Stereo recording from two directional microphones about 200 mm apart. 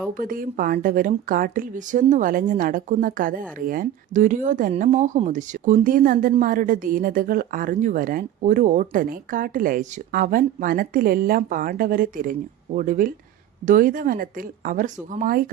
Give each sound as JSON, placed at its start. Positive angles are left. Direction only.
{"t": 0.1, "sound": "speech", "side_deg": -45}